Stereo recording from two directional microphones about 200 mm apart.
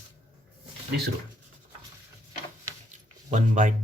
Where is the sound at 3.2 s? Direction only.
35° right (ahead or behind).